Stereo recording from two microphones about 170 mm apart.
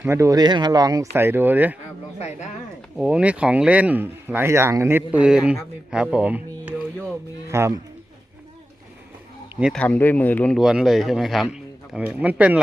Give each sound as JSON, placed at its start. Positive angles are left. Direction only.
{"t": 0.0, "sound": "speech", "side_deg": -15}
{"t": 2.1, "sound": "speech", "side_deg": 40}
{"t": 3.0, "sound": "speech", "side_deg": -5}
{"t": 5.9, "sound": "music", "side_deg": -5}
{"t": 9.7, "sound": "speech", "side_deg": 10}
{"t": 10.6, "sound": "speech", "side_deg": -5}